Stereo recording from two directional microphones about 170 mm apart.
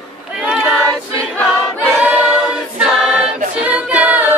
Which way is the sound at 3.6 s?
10° right (ahead or behind).